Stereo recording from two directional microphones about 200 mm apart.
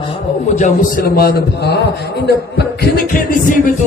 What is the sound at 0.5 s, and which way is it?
A man's voice, 40° left (ahead or behind).